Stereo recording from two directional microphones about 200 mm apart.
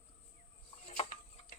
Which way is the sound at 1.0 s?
30° left (ahead or behind).